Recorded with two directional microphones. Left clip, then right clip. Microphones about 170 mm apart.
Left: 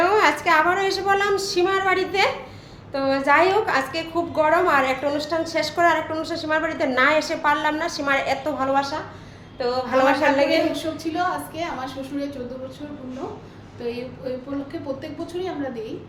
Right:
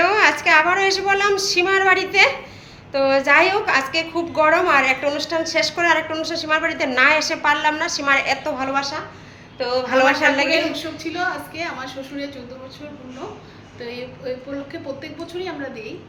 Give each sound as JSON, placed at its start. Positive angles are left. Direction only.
{"t": 0.0, "sound": "a sound", "side_deg": -10}
{"t": 0.4, "sound": "a woman's voice", "side_deg": -10}
{"t": 10.8, "sound": "a woman's voice", "side_deg": 20}
{"t": 14.3, "sound": "a woman's voice", "side_deg": 20}